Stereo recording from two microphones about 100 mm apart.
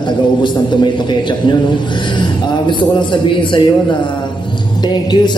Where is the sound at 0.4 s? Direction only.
50° left (ahead or behind).